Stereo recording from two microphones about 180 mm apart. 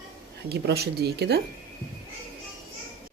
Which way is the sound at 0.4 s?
65° right (ahead or behind).